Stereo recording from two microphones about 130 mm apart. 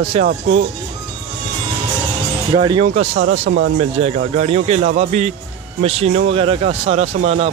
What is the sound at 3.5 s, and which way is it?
Speech, 90° right.